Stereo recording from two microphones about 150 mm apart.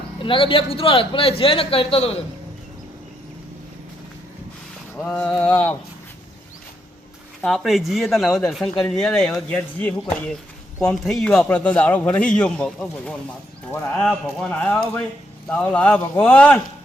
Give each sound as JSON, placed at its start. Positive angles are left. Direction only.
{"t": 0.2, "sound": "a man's voice", "side_deg": 35}
{"t": 4.9, "sound": "a man's voice", "side_deg": 10}
{"t": 7.4, "sound": "a man's voice", "side_deg": 0}